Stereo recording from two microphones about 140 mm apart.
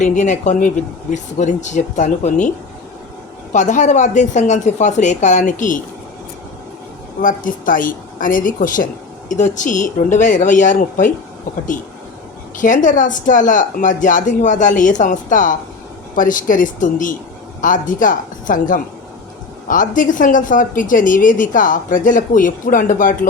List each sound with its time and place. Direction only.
0.0 s speech: 60° left (ahead or behind)
3.5 s speech: 60° left (ahead or behind)
7.2 s a woman's voice: 70° left (ahead or behind)
12.5 s a woman's voice: 70° left (ahead or behind)